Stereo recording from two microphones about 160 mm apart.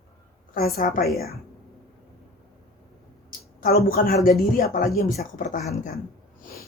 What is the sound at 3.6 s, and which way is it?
A woman's voice, 70° left (ahead or behind).